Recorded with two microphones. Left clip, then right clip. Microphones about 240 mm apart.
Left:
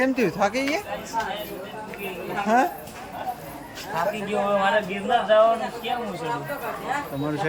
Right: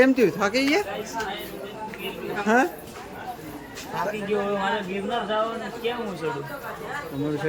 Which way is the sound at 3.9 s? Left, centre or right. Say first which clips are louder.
Left 1 dB; centre.